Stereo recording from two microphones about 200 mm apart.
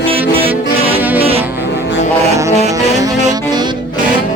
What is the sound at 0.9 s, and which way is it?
Music, 10° right (ahead or behind).